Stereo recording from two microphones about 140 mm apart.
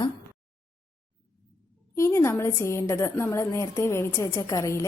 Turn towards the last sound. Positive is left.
turn(degrees=25)  # may be behind; listen again after turning